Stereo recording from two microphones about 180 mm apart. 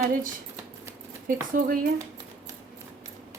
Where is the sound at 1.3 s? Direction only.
50° right (ahead or behind).